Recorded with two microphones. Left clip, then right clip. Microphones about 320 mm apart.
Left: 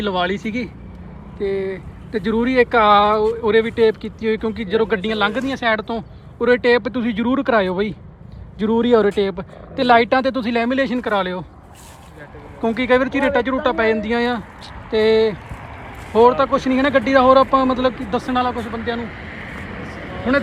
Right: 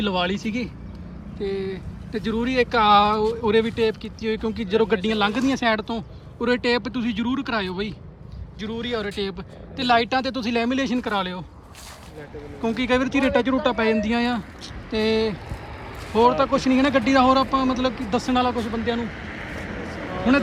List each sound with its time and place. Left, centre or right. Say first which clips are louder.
0.0 s speech: left 4 dB; centre
12.6 s speech: left 6 dB; centre
18.9 s a sound: left 1 dB; right